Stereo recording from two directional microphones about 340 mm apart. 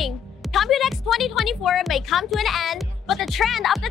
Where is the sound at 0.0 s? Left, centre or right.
Centre.